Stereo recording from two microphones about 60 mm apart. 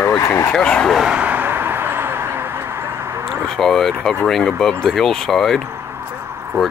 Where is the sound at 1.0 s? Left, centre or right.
Centre.